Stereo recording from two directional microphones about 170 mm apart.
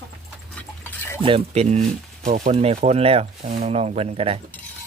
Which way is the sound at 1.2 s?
35° right (ahead or behind).